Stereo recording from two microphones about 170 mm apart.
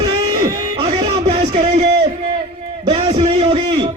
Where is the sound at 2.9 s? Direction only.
35° right (ahead or behind).